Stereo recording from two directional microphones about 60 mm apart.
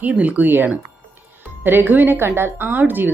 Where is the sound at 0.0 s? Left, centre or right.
Right.